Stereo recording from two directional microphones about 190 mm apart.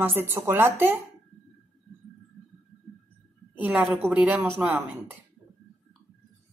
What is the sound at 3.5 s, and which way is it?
Speech, 10° right (ahead or behind).